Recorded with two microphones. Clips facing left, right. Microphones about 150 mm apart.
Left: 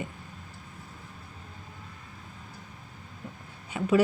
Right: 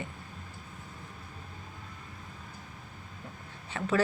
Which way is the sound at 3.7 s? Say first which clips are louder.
Left 5 dB; 10° left (ahead or behind).